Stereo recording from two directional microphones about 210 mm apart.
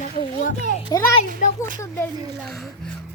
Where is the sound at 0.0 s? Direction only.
35° left (ahead or behind).